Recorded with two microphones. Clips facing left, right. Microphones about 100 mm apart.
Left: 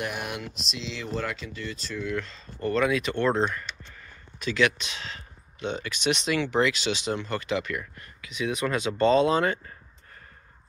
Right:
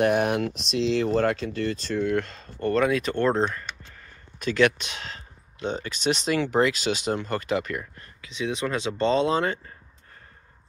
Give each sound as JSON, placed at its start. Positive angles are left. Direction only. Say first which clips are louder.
{"t": 0.0, "sound": "speech", "louder": "right 11 dB", "side_deg": -45}
{"t": 8.0, "sound": "speech", "louder": "even", "side_deg": -30}